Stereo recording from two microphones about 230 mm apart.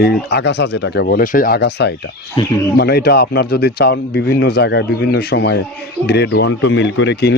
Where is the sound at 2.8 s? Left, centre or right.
Left.